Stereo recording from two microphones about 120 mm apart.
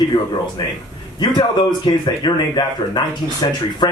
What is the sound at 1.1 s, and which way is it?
Speech, 40° left (ahead or behind).